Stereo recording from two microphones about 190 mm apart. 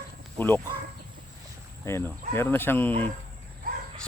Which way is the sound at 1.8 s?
15° left (ahead or behind).